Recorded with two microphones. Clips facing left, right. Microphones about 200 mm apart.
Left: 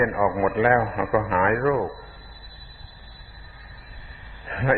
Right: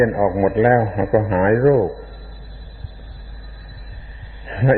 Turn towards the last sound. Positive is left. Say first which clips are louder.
# right 6 dB
turn(degrees=-25)  # may be behind; listen again after turning